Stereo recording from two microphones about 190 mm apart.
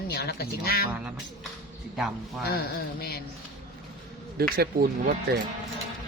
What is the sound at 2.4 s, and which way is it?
Mantra, 55° left (ahead or behind).